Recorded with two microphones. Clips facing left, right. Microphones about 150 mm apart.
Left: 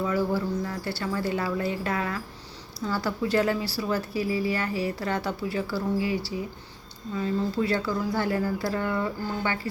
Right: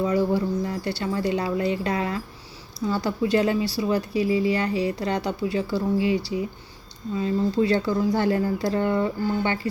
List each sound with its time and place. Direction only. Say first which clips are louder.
0.0 s speech: right 4 dB; 20° right (ahead or behind)